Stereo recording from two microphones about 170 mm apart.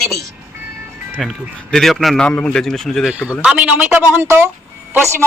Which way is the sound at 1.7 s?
Centre (ahead or behind).